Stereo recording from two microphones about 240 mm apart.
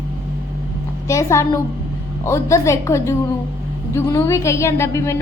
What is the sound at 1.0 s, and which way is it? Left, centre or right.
A woman's voice, centre.